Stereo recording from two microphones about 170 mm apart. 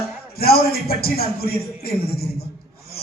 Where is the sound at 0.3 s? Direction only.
65° left (ahead or behind).